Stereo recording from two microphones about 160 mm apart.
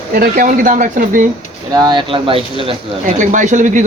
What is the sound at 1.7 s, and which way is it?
Speech, 25° right (ahead or behind).